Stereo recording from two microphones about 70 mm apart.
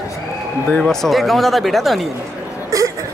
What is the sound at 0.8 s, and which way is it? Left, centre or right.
Speech, centre.